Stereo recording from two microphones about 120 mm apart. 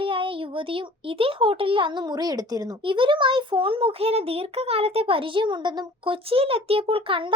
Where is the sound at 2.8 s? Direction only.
45° right (ahead or behind).